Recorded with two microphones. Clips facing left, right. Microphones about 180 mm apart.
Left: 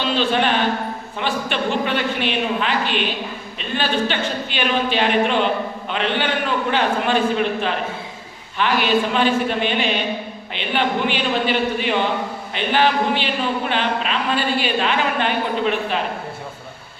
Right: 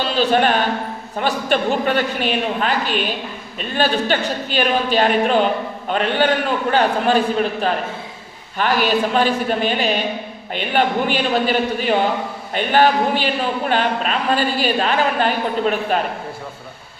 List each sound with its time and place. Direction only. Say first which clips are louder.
0.0 s a woman's voice: right 3 dB; 45° right (ahead or behind)